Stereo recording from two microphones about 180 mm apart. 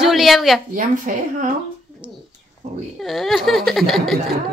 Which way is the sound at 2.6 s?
40° right (ahead or behind).